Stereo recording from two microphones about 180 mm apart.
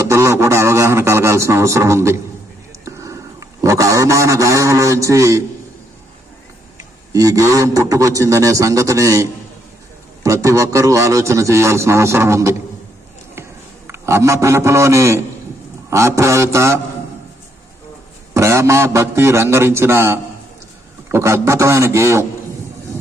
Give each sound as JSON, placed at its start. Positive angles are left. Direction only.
{"t": 0.0, "sound": "a sound", "side_deg": -15}
{"t": 7.1, "sound": "a man's voice", "side_deg": -20}
{"t": 10.2, "sound": "a man's voice", "side_deg": -15}
{"t": 13.8, "sound": "a man's voice", "side_deg": -15}
{"t": 18.3, "sound": "a man's voice", "side_deg": -15}